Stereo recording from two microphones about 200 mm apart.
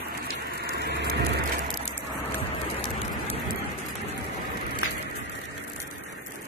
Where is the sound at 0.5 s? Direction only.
55° right (ahead or behind).